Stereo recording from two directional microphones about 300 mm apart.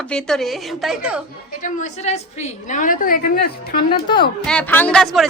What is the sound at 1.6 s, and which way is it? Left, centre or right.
A woman's voice, left.